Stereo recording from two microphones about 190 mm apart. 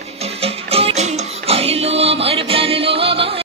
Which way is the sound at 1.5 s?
30° right (ahead or behind).